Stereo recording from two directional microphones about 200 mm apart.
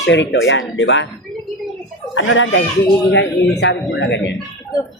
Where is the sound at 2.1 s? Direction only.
80° left; by 4.4 s 60° left (ahead or behind).